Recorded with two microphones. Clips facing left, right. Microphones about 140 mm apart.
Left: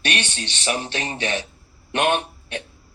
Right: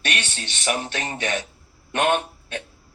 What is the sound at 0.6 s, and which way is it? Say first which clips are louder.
Speech: even; 25° left (ahead or behind).